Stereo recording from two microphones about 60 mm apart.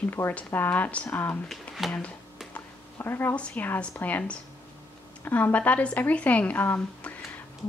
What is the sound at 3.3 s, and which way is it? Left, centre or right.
Speech, centre.